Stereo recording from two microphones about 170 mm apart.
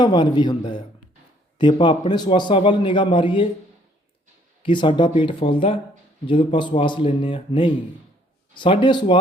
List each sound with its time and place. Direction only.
0.0 s a man's voice: 25° left (ahead or behind)
4.6 s a man's voice: 30° left (ahead or behind)